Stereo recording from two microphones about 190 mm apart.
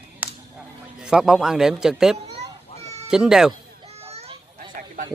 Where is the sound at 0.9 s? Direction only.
5° right (ahead or behind).